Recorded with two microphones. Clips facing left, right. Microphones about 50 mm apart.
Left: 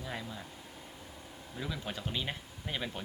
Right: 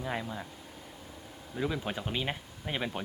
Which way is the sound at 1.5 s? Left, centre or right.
Centre.